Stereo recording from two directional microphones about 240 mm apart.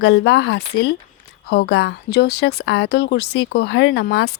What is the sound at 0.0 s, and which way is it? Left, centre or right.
A woman's voice, left.